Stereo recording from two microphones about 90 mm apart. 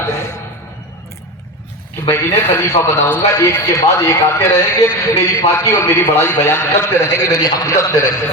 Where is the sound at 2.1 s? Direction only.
30° left (ahead or behind).